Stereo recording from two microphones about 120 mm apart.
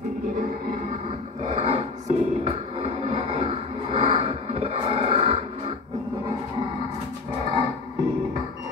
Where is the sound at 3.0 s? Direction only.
65° right (ahead or behind).